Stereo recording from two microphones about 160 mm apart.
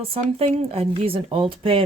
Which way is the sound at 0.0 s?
40° right (ahead or behind).